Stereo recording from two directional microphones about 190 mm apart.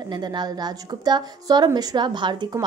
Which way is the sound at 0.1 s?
20° right (ahead or behind).